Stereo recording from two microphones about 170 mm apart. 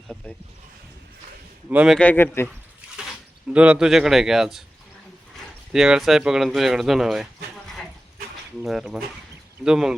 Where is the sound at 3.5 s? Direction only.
5° right (ahead or behind).